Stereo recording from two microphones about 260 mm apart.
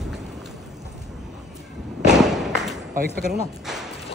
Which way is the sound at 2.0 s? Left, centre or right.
Centre.